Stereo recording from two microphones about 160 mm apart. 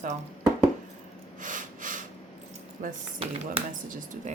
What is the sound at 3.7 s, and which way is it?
Speech, 55° right (ahead or behind).